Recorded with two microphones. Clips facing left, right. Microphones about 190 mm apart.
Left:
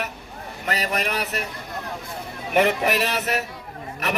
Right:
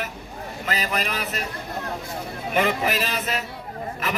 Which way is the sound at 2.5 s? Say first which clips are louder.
Left 3 dB; 65° left (ahead or behind).